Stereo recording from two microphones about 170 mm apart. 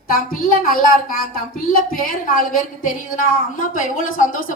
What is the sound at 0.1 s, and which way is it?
A woman's voice, 55° left (ahead or behind).